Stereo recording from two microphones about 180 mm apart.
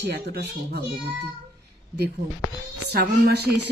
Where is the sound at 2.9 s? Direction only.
65° right (ahead or behind).